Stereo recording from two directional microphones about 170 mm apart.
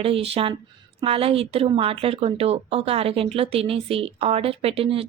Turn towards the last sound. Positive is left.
turn(degrees=-35)  # may be behind; listen again after turning